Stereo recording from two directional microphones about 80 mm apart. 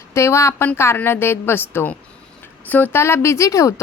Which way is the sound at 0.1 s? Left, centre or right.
Left.